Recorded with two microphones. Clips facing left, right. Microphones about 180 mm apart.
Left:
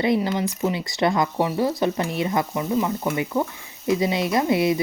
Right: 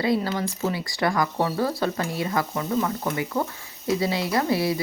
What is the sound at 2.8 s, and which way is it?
Stir, 15° left (ahead or behind).